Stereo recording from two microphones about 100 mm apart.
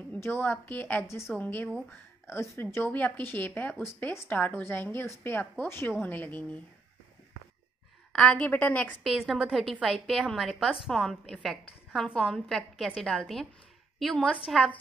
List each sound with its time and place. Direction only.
0.1 s a woman's voice: 20° left (ahead or behind)
2.2 s a woman's voice: 30° left (ahead or behind)
8.1 s a woman's voice: 10° left (ahead or behind)
9.0 s a woman's voice: centre (ahead or behind)